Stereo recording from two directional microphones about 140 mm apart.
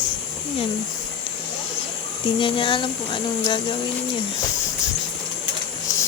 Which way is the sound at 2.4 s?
35° left (ahead or behind).